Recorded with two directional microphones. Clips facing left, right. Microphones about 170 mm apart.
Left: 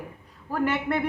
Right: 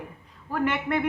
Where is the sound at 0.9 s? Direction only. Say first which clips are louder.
Even; 40° left (ahead or behind).